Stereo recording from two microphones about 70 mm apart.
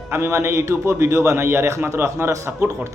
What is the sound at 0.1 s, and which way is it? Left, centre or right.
A man's voice, right.